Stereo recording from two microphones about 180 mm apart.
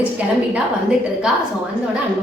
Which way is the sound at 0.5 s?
5° right (ahead or behind).